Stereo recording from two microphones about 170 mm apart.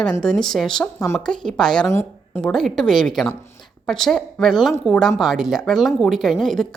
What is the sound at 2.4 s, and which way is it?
A woman's voice, centre (ahead or behind).